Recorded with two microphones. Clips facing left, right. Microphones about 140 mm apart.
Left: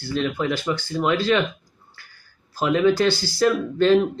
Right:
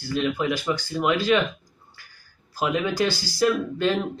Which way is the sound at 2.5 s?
10° right (ahead or behind).